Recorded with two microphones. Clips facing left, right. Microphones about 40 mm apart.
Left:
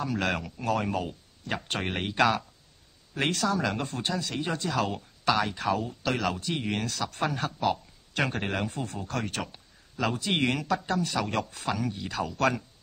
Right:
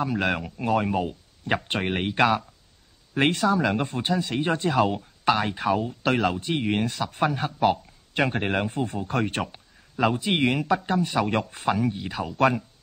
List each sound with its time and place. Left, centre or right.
0.0 s speech: centre
3.2 s a man's voice: right
6.0 s a man's voice: right
7.6 s a sound: right
8.3 s a man's voice: right